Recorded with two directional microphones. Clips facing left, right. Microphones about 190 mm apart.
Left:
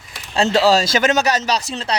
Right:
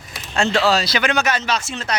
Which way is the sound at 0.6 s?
45° left (ahead or behind).